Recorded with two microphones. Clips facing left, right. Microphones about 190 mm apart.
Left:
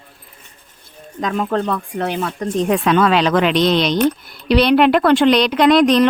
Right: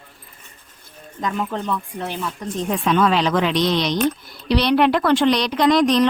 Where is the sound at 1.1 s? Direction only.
75° left (ahead or behind).